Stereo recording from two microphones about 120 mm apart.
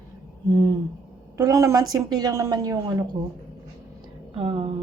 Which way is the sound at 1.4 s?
25° right (ahead or behind).